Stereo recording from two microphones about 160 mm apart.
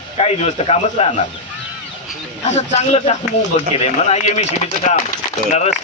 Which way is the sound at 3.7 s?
40° left (ahead or behind).